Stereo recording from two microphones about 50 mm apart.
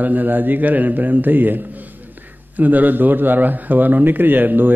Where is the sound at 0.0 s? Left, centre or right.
Right.